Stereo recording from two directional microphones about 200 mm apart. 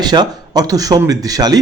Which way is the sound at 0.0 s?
20° right (ahead or behind).